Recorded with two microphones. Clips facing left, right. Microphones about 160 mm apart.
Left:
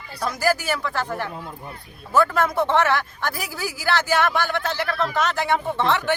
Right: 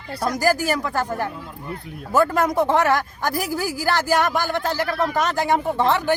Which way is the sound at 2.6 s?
40° right (ahead or behind).